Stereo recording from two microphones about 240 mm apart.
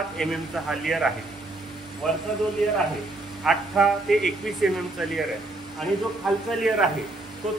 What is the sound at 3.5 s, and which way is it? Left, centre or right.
A man's voice, centre.